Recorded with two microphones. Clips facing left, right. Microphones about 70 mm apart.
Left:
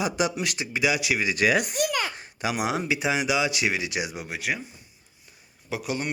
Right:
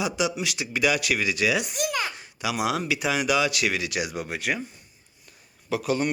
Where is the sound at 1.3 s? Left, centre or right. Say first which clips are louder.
Left 4 dB; left.